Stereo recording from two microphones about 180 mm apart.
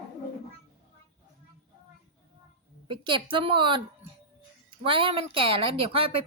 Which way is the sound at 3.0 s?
25° right (ahead or behind).